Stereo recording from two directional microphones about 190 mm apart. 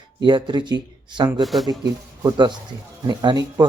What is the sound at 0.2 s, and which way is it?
Speech, 25° right (ahead or behind).